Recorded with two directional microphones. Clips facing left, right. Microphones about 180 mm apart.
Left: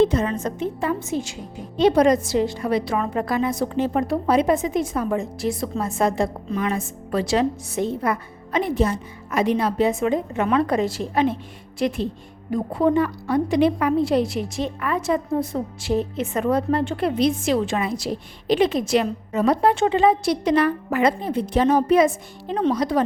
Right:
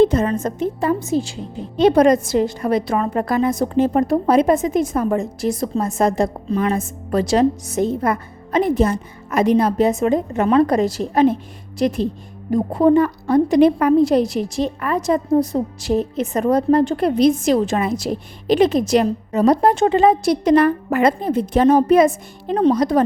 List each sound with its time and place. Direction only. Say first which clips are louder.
0.0 s a woman's voice: right 4 dB; 45° right (ahead or behind)
1.8 s a woman's voice: right 3 dB; 50° right (ahead or behind)